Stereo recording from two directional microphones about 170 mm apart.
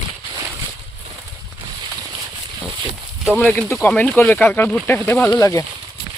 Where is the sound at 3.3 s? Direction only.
10° left (ahead or behind).